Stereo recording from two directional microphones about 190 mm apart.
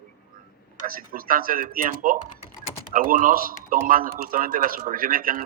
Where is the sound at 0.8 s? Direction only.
50° right (ahead or behind).